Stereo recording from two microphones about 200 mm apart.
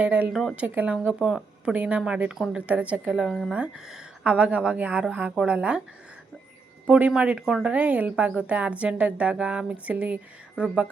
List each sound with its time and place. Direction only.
0.0 s a woman's voice: 10° right (ahead or behind)
6.8 s a woman's voice: 5° right (ahead or behind)